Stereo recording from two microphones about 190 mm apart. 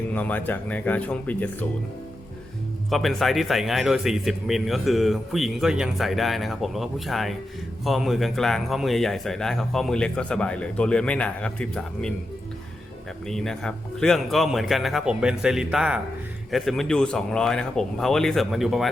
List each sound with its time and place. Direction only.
0.1 s speech: 10° left (ahead or behind)
2.9 s speech: centre (ahead or behind)
13.2 s speech: centre (ahead or behind)